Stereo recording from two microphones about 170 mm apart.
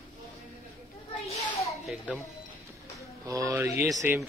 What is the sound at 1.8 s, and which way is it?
Speech, centre (ahead or behind).